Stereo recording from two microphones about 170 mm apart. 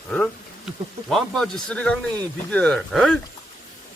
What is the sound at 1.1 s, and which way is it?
Speech, 5° left (ahead or behind).